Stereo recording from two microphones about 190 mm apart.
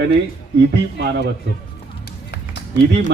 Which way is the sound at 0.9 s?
65° right (ahead or behind).